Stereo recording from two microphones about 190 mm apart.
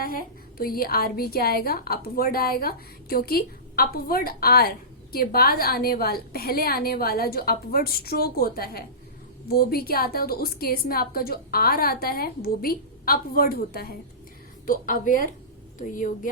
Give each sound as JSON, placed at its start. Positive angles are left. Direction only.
{"t": 0.0, "sound": "a woman's voice", "side_deg": 50}